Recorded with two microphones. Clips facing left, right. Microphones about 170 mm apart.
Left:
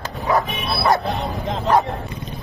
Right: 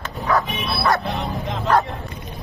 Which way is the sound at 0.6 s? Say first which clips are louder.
Left 2 dB; 25° left (ahead or behind).